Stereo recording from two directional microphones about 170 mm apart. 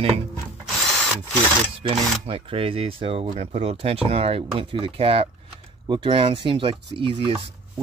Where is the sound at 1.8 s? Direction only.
30° right (ahead or behind).